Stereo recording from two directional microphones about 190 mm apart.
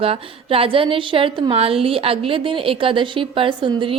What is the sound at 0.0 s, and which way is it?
A woman's voice, 30° right (ahead or behind).